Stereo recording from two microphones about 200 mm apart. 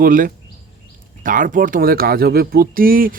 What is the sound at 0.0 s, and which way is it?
Speech, 45° right (ahead or behind).